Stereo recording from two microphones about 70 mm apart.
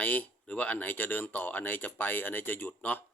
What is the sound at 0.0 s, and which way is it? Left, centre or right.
Speech, left.